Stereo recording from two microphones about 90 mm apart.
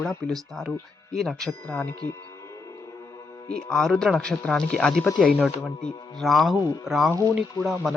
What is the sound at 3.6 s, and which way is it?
A man's voice, 10° left (ahead or behind).